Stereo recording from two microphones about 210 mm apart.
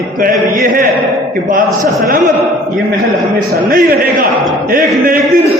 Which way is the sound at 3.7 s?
40° right (ahead or behind).